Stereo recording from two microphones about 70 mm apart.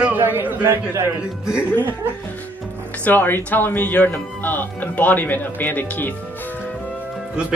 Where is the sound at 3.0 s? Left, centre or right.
Left.